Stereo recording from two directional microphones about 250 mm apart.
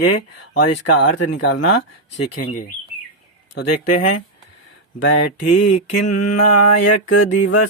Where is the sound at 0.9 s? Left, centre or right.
Left.